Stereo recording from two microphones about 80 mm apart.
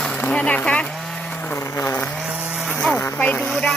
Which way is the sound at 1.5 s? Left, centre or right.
Left.